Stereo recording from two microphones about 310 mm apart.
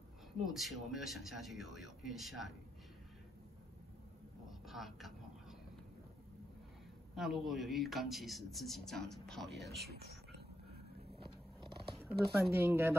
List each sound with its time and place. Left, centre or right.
0.4 s a man's voice: centre
4.5 s a sound: centre
7.2 s a man's voice: centre
9.8 s speech: right
11.9 s speech: centre